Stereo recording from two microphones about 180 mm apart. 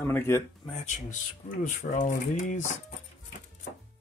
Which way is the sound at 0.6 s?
35° left (ahead or behind).